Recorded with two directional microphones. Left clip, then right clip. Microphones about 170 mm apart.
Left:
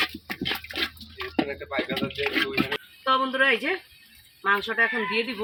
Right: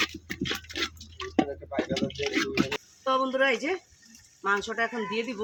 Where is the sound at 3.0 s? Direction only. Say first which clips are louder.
Left 3 dB; 20° right (ahead or behind).